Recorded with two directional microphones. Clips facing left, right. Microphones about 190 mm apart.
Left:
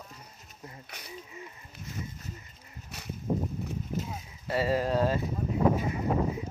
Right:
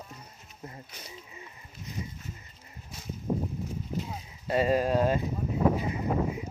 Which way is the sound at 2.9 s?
70° left (ahead or behind).